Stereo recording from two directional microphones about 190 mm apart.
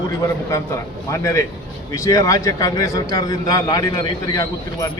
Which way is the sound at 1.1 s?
15° left (ahead or behind).